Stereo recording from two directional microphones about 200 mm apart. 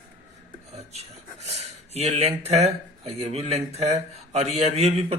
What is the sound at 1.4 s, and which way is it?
Speech, 30° right (ahead or behind).